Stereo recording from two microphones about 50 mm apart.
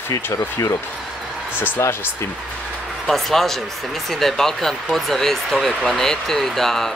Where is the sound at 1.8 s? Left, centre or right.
Left.